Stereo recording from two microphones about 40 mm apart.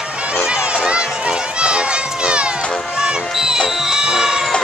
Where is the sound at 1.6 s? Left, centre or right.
Right.